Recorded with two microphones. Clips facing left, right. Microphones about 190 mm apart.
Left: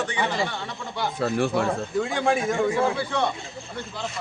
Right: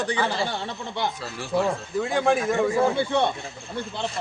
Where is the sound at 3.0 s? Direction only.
30° right (ahead or behind).